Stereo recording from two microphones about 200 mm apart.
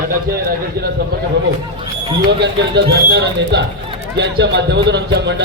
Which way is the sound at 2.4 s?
60° right (ahead or behind).